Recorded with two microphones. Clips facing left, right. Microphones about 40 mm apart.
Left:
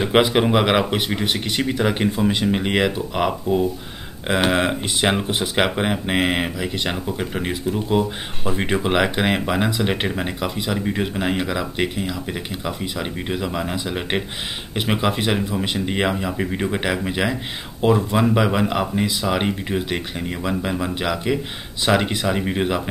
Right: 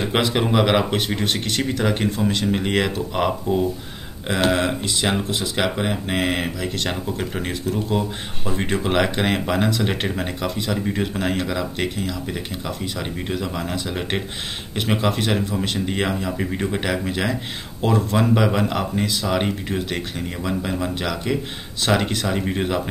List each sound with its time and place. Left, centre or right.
0.0 s speech: centre
4.3 s speech: centre